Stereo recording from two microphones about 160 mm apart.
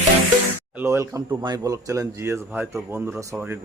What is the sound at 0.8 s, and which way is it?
Speech, 20° right (ahead or behind).